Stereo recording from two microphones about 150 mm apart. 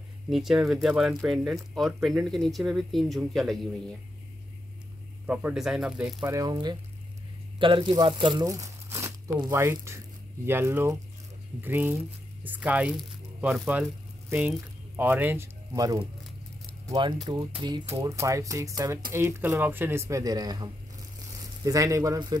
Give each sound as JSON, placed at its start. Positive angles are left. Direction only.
{"t": 0.3, "sound": "speech", "side_deg": 0}
{"t": 5.2, "sound": "speech", "side_deg": -10}
{"t": 6.2, "sound": "speech", "side_deg": -25}
{"t": 15.0, "sound": "speech", "side_deg": -10}